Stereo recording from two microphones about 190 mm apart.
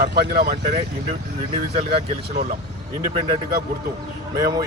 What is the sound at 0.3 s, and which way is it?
Speech, 50° right (ahead or behind).